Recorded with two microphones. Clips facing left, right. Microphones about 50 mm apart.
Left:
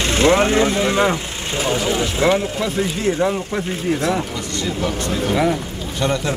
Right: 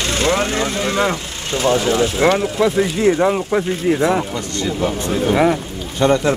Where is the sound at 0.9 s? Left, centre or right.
Centre.